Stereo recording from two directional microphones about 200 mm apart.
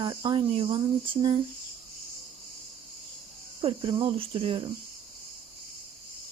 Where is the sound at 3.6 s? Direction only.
25° right (ahead or behind).